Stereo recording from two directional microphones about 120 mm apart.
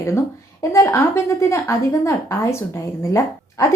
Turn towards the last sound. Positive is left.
turn(degrees=25)  # may be behind; listen again after turning